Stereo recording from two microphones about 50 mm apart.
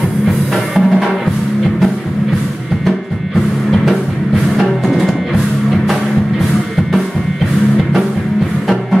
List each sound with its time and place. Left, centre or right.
0.7 s music: centre
4.6 s music: centre